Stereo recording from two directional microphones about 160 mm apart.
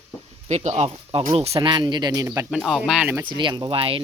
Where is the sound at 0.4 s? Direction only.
45° right (ahead or behind).